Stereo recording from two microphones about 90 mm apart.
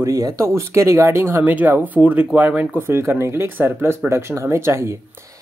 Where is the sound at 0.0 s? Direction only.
35° right (ahead or behind).